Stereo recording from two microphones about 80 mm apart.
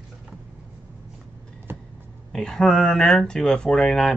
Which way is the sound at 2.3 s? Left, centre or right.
Centre.